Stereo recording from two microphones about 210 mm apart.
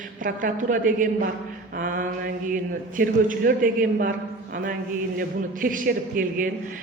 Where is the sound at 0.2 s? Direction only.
40° right (ahead or behind).